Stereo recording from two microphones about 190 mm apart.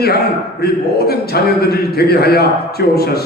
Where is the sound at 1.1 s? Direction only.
55° left (ahead or behind).